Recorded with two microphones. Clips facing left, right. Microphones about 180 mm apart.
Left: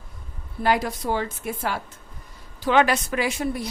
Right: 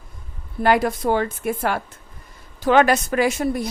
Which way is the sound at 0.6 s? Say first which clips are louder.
Right 5 dB; 55° right (ahead or behind).